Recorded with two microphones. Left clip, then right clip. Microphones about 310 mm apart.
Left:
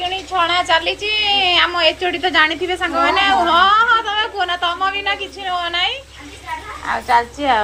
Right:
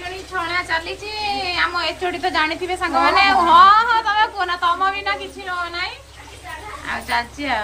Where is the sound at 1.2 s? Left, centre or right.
Centre.